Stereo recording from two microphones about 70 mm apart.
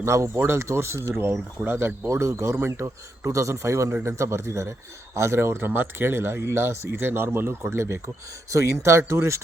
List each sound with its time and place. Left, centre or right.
0.0 s speech: right
2.0 s speech: right